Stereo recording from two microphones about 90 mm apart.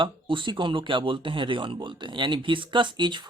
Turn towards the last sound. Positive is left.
turn(degrees=-60)  # may be behind; listen again after turning